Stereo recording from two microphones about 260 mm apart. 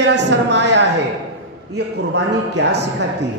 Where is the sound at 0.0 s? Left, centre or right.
Right.